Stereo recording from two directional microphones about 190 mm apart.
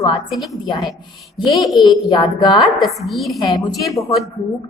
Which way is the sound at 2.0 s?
25° left (ahead or behind).